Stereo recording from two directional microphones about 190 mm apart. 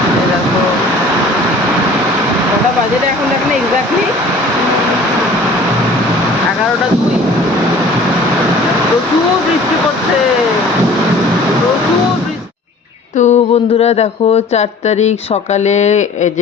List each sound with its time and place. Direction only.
13.1 s speech: 35° left (ahead or behind)